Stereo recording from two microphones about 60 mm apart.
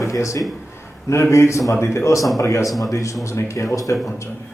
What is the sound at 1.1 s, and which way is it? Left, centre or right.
A man's voice, left.